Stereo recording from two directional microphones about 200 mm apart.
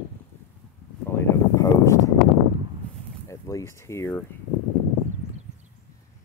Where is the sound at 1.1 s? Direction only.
15° left (ahead or behind).